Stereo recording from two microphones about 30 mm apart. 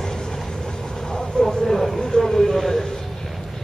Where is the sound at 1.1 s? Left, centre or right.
Left.